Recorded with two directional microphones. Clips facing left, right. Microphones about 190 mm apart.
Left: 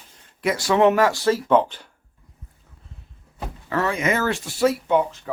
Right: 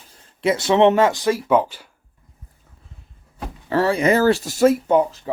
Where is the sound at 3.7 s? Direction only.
30° right (ahead or behind).